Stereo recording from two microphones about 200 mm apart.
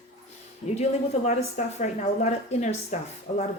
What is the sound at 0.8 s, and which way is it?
Speech, 35° left (ahead or behind).